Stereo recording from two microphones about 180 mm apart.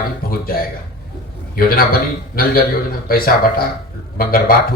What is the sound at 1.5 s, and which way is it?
Speech, 55° left (ahead or behind).